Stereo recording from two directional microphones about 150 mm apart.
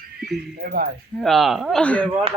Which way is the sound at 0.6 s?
80° right.